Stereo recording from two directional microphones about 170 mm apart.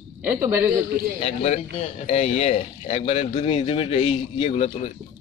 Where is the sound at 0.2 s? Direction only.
10° right (ahead or behind).